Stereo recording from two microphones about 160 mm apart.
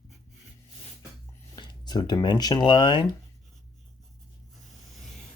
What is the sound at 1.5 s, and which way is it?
Speech, 25° left (ahead or behind).